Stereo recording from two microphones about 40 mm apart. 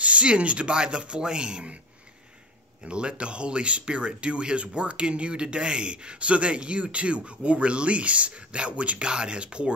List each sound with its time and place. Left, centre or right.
0.0 s speech: right
2.8 s speech: right